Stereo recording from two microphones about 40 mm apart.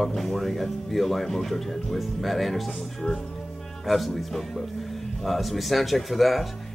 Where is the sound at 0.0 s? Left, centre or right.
Centre.